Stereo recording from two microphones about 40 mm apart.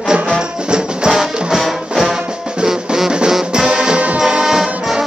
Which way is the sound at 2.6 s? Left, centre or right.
Centre.